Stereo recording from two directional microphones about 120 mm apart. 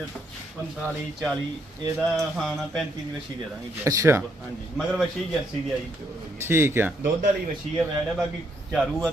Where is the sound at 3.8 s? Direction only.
25° right (ahead or behind).